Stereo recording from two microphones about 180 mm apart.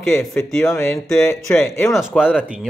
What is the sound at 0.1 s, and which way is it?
Speech, 5° left (ahead or behind).